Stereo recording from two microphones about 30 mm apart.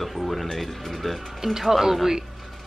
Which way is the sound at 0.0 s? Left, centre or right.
Centre.